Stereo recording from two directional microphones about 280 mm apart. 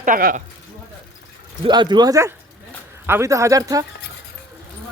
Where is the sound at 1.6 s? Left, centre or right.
Centre.